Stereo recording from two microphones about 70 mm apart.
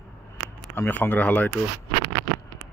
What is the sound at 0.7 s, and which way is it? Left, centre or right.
Speech, left.